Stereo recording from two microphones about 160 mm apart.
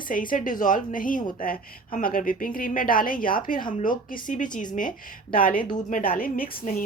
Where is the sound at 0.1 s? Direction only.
60° left (ahead or behind).